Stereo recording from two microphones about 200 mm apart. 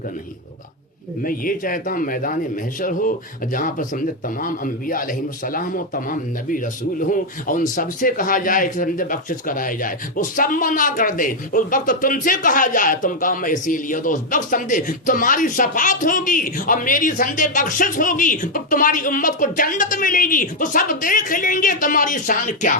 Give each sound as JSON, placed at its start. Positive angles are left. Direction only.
{"t": 1.2, "sound": "a man's voice", "side_deg": 45}